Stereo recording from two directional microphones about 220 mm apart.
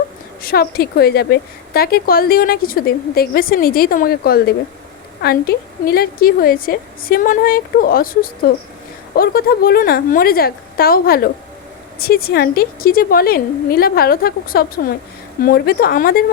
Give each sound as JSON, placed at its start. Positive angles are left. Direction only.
{"t": 0.4, "sound": "a woman's voice", "side_deg": 45}